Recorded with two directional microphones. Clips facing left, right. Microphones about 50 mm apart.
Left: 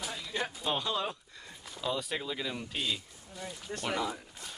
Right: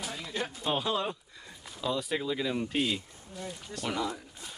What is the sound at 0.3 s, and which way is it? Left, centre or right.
Music, centre.